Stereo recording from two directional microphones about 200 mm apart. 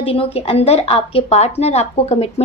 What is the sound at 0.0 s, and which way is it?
A woman's voice, 30° left (ahead or behind).